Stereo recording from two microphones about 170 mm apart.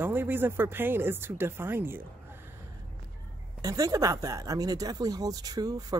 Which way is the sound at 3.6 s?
20° right (ahead or behind).